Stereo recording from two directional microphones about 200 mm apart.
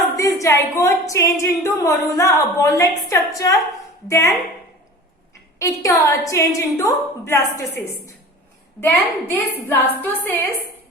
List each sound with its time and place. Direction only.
0.2 s a woman's voice: 15° left (ahead or behind)
5.5 s a woman's voice: 15° left (ahead or behind)
8.8 s a woman's voice: 10° left (ahead or behind)